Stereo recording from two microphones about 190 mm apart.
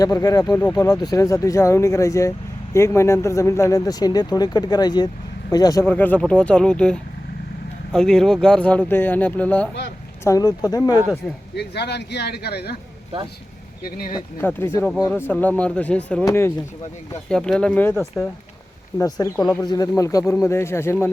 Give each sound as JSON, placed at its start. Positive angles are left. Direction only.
{"t": 0.0, "sound": "speech", "side_deg": 20}
{"t": 5.8, "sound": "speech", "side_deg": 10}
{"t": 11.5, "sound": "speech", "side_deg": 60}
{"t": 14.4, "sound": "speech", "side_deg": 15}
{"t": 18.9, "sound": "speech", "side_deg": 20}